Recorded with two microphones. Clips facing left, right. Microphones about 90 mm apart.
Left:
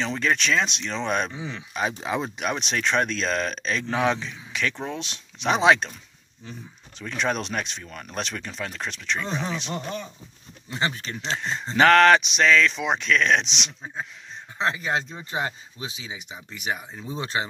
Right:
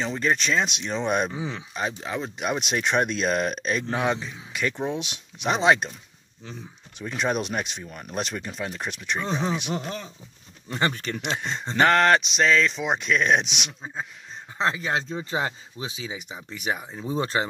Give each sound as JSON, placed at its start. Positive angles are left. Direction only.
{"t": 0.0, "sound": "speech", "side_deg": -10}
{"t": 1.3, "sound": "speech", "side_deg": -35}
{"t": 1.7, "sound": "speech", "side_deg": 5}
{"t": 2.3, "sound": "speech", "side_deg": -5}
{"t": 7.0, "sound": "speech", "side_deg": -10}
{"t": 9.3, "sound": "speech", "side_deg": -25}
{"t": 9.6, "sound": "speech", "side_deg": -10}
{"t": 11.7, "sound": "speech", "side_deg": 0}
{"t": 14.7, "sound": "speech", "side_deg": -25}